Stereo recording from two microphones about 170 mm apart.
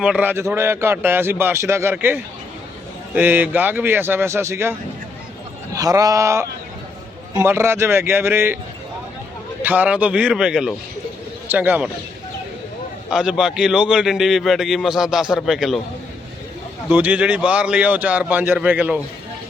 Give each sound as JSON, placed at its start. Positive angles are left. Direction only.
{"t": 0.0, "sound": "a man's voice", "side_deg": -5}
{"t": 9.6, "sound": "a man's voice", "side_deg": -10}
{"t": 13.1, "sound": "a man's voice", "side_deg": -5}
{"t": 16.9, "sound": "a man's voice", "side_deg": -10}